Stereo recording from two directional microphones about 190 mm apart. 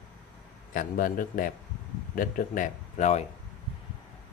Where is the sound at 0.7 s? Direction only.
45° left (ahead or behind).